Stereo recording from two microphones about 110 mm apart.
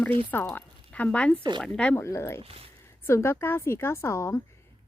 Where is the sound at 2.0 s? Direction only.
25° left (ahead or behind).